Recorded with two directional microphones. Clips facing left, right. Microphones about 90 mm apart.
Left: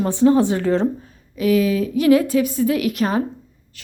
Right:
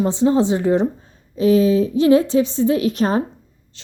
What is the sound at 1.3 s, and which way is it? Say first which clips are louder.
Speech: right 3 dB; 30° right (ahead or behind).